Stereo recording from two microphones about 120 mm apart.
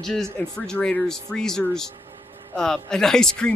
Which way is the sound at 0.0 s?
5° left (ahead or behind).